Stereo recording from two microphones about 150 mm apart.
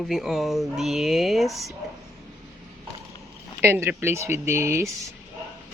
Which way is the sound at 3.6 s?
15° right (ahead or behind).